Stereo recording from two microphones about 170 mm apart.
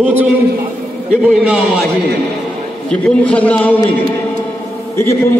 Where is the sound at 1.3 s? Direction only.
Centre (ahead or behind).